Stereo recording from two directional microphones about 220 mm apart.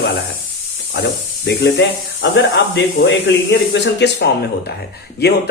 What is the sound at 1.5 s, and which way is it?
Speech, 55° left (ahead or behind).